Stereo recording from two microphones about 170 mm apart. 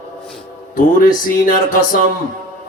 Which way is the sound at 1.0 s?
55° left (ahead or behind).